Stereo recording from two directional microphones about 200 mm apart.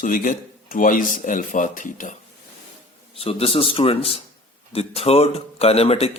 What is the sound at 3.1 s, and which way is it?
A man's voice, 30° left (ahead or behind).